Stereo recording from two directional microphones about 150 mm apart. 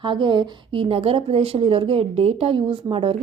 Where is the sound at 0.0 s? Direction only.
30° right (ahead or behind).